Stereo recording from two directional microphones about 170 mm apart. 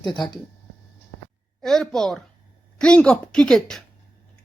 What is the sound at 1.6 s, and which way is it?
Speech, centre (ahead or behind).